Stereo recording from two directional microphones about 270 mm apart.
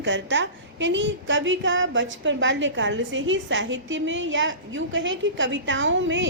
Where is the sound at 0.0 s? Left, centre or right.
Right.